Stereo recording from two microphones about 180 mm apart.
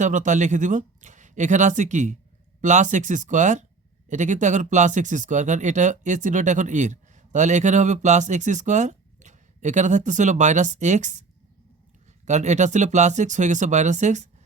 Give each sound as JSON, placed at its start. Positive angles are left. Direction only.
{"t": 0.0, "sound": "speech", "side_deg": -45}